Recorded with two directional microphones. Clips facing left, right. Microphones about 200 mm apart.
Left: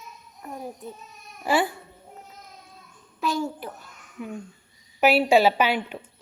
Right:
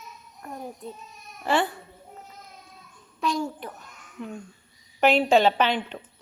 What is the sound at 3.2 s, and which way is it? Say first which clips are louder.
A child's voice: left 1 dB; 5° left (ahead or behind).